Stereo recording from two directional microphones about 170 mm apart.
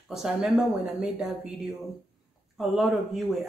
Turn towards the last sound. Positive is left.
turn(degrees=0)  # may be behind; listen again after turning